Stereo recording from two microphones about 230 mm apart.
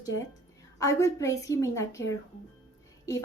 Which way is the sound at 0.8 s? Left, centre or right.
Centre.